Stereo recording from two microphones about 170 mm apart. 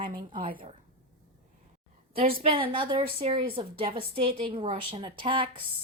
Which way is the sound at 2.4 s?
30° right (ahead or behind).